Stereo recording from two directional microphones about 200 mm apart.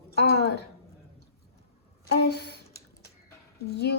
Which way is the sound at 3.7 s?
55° left (ahead or behind).